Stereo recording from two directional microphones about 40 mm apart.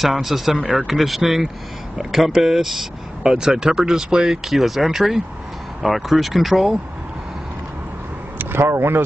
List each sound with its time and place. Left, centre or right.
0.0 s speech: centre
4.5 s speech: centre
8.4 s speech: right